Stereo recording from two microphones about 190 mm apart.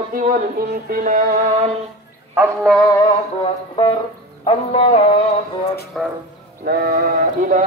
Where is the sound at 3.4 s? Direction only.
25° left (ahead or behind).